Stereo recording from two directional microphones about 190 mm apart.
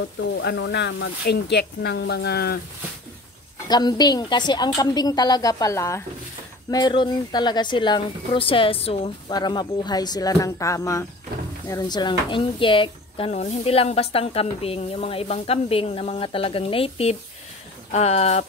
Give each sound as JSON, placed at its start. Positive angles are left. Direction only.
{"t": 0.4, "sound": "speech", "side_deg": 65}
{"t": 3.6, "sound": "speech", "side_deg": 20}